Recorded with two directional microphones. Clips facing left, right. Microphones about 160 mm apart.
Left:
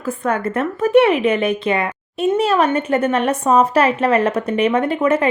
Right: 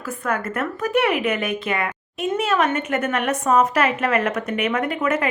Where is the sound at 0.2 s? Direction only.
30° left (ahead or behind).